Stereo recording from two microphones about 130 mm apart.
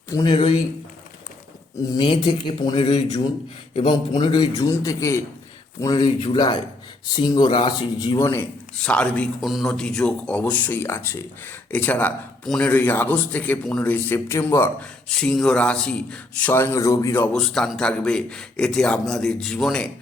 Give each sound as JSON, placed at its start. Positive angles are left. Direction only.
{"t": 0.1, "sound": "speech", "side_deg": 30}
{"t": 1.9, "sound": "a man's voice", "side_deg": 35}
{"t": 8.2, "sound": "a man's voice", "side_deg": 20}
{"t": 8.8, "sound": "speech", "side_deg": 10}
{"t": 9.4, "sound": "speech", "side_deg": 0}
{"t": 15.2, "sound": "speech", "side_deg": 5}
{"t": 17.3, "sound": "a man's voice", "side_deg": 5}